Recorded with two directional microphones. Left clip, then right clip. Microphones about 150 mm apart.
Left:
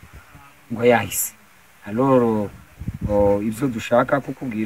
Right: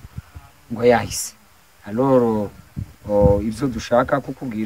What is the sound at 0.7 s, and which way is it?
Speech, 20° right (ahead or behind).